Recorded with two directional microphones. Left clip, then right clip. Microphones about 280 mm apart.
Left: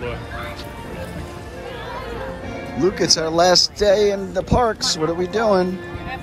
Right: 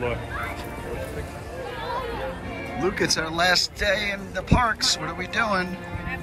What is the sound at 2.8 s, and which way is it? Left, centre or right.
Speech, centre.